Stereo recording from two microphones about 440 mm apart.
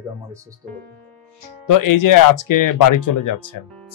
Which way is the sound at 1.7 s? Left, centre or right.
Left.